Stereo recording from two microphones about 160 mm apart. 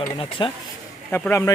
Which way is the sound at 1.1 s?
10° left (ahead or behind).